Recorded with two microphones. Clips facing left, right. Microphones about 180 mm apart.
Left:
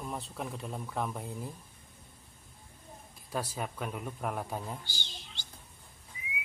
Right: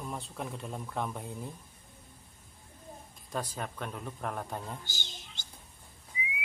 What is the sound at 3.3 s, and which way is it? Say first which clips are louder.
A man's voice: left 1 dB; 5° left (ahead or behind).